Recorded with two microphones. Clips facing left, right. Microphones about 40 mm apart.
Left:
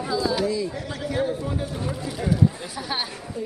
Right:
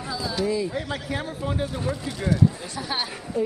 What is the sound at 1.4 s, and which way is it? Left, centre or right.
Speech, right.